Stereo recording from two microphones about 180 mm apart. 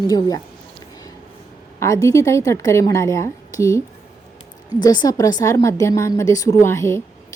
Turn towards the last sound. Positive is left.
turn(degrees=15)  # may be behind; listen again after turning